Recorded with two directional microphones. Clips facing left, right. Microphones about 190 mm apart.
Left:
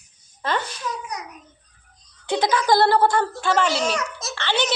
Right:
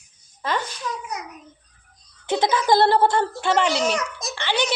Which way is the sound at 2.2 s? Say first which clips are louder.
Even; 20° right (ahead or behind).